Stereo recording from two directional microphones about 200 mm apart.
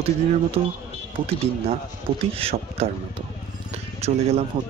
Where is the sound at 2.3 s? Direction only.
30° right (ahead or behind).